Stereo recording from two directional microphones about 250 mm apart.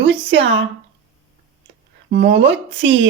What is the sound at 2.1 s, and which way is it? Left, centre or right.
Speech, right.